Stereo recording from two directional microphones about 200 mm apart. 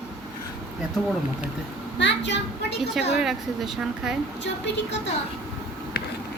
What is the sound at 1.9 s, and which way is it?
Speech, 60° left (ahead or behind).